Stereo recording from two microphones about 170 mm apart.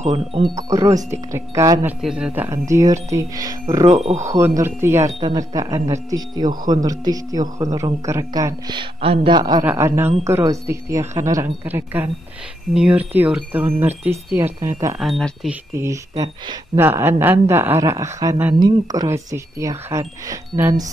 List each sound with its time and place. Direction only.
0.1 s speech: 30° right (ahead or behind)
2.0 s speech: 5° right (ahead or behind); by 3.8 s 20° right (ahead or behind)
3.8 s chime: 40° right (ahead or behind)
4.3 s speech: 15° right (ahead or behind)
9.7 s speech: 15° right (ahead or behind)
15.0 s speech: centre (ahead or behind)
15.7 s speech: 15° right (ahead or behind)